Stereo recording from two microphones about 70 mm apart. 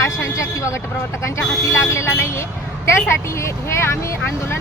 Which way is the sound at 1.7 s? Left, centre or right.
Left.